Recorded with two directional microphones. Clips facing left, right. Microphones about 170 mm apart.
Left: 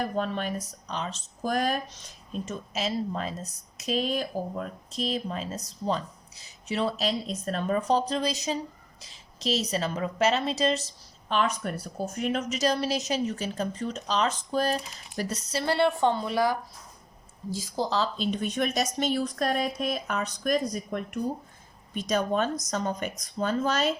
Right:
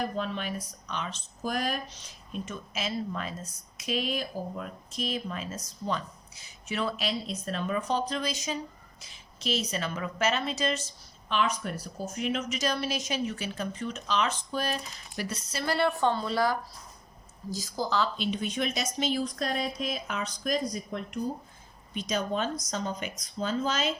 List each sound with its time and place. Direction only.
0.2 s speech: 45° left (ahead or behind)
1.4 s a woman's voice: 45° left (ahead or behind)
11.3 s a woman's voice: 45° left (ahead or behind)
15.6 s a woman's voice: 25° left (ahead or behind)
17.7 s a woman's voice: 30° left (ahead or behind)
18.3 s speech: 50° left (ahead or behind)